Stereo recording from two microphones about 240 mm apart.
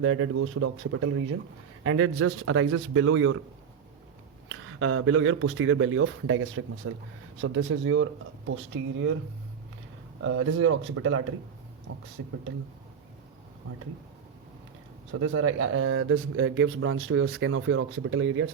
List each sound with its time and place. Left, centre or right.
0.0 s speech: right
4.4 s speech: right
10.2 s speech: right
12.2 s speech: right
15.1 s speech: right